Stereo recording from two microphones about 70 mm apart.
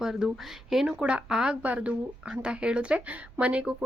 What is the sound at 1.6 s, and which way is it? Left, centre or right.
Speech, centre.